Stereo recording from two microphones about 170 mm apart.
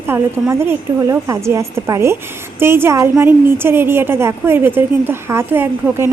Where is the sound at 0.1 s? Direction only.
15° right (ahead or behind).